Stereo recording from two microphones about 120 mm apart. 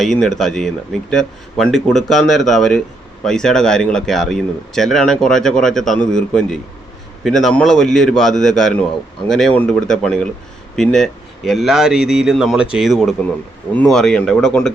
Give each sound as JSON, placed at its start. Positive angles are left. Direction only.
{"t": 0.0, "sound": "a man's voice", "side_deg": 0}